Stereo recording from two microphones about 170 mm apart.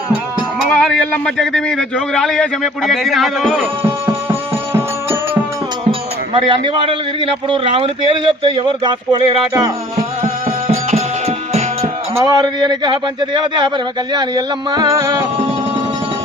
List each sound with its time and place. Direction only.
0.7 s speech: 5° left (ahead or behind)
3.6 s music: 15° right (ahead or behind)
6.3 s a man's voice: 30° right (ahead or behind)
10.7 s music: 35° right (ahead or behind)
12.1 s a man's voice: 20° right (ahead or behind)